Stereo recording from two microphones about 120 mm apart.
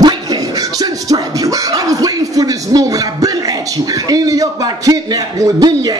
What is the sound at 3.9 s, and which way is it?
A man's voice, 30° right (ahead or behind).